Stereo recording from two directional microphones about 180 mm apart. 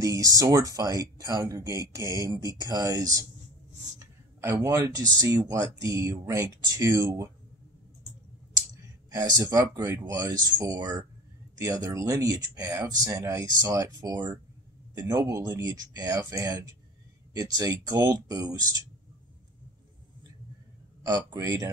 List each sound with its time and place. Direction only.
0.0 s speech: 20° right (ahead or behind)
9.1 s speech: 20° right (ahead or behind)
21.0 s speech: 20° right (ahead or behind)